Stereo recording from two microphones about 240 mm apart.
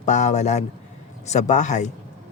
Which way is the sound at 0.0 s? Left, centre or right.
Left.